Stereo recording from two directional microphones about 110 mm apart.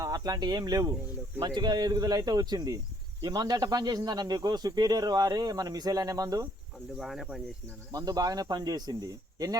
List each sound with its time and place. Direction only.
0.0 s speech: 35° right (ahead or behind)
7.0 s speech: centre (ahead or behind)
7.9 s speech: 35° right (ahead or behind)